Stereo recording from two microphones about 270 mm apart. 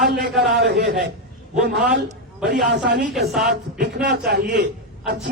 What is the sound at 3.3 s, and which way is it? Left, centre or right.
Speech, centre.